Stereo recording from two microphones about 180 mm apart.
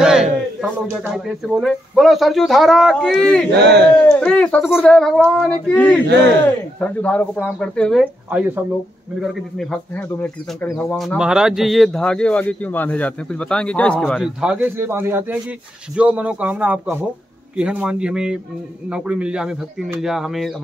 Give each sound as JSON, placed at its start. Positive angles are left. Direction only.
{"t": 0.0, "sound": "a sound", "side_deg": -5}
{"t": 0.9, "sound": "speech", "side_deg": -5}
{"t": 3.5, "sound": "speech", "side_deg": -70}
{"t": 4.1, "sound": "speech", "side_deg": 5}
{"t": 8.0, "sound": "speech", "side_deg": -10}
{"t": 14.4, "sound": "speech", "side_deg": -5}